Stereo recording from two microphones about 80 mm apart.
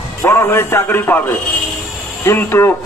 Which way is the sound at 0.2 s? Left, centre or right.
Left.